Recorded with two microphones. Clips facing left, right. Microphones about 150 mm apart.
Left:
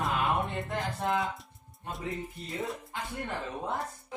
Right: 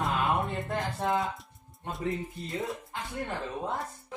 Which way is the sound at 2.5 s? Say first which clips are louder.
Right 1 dB; centre (ahead or behind).